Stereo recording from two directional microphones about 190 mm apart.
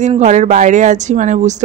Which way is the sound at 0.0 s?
35° right (ahead or behind).